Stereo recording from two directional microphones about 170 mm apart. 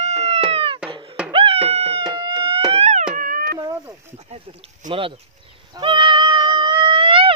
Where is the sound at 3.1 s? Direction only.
60° right (ahead or behind).